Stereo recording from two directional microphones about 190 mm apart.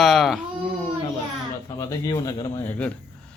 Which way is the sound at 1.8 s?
20° left (ahead or behind).